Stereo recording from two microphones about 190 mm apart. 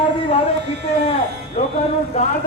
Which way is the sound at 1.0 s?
35° left (ahead or behind).